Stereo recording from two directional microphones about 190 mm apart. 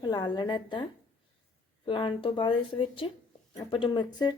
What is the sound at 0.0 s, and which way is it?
Speech, 20° left (ahead or behind).